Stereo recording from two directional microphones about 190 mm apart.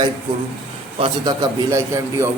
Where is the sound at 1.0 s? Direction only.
20° right (ahead or behind).